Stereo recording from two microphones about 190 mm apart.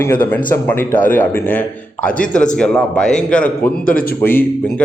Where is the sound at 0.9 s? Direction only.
45° left (ahead or behind).